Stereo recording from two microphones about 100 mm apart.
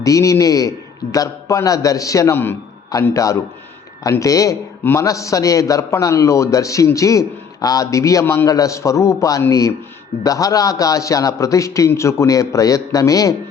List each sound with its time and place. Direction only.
0.0 s a man's voice: 35° left (ahead or behind)
4.8 s a man's voice: 20° left (ahead or behind)
5.0 s a man's voice: 35° left (ahead or behind)